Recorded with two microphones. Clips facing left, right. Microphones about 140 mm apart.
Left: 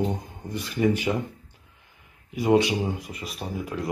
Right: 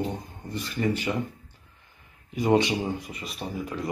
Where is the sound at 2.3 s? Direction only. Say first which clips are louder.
Left 1 dB; 10° left (ahead or behind).